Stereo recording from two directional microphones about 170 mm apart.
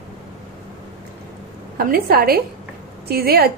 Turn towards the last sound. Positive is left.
turn(degrees=-65)  # may be behind; listen again after turning